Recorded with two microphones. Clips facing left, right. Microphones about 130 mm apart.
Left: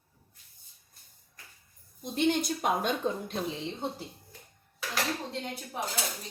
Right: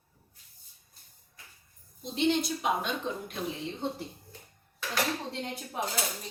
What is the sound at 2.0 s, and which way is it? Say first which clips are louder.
Speech: even; 50° left (ahead or behind).